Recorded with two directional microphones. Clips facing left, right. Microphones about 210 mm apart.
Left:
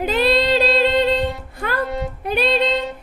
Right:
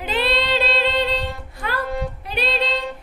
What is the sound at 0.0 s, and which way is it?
Female singing, 45° left (ahead or behind).